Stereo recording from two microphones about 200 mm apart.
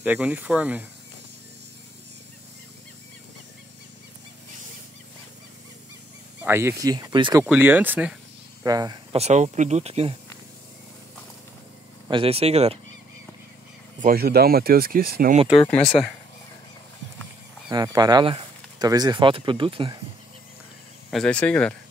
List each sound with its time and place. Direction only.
0.0 s speech: 5° right (ahead or behind)
6.4 s speech: 10° right (ahead or behind)
7.4 s speech: 10° right (ahead or behind)
8.6 s speech: 20° right (ahead or behind)
9.2 s speech: 35° right (ahead or behind)
12.1 s speech: 30° right (ahead or behind)
14.0 s speech: 50° right (ahead or behind)
15.7 s speech: 25° left (ahead or behind)
17.6 s speech: 20° right (ahead or behind)
21.1 s speech: 5° left (ahead or behind)